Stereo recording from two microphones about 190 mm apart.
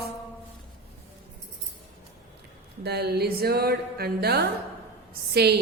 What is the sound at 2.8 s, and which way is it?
Speech, 60° right (ahead or behind).